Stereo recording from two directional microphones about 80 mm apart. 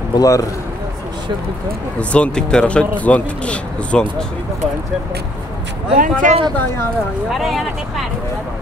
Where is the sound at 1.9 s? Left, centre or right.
Centre.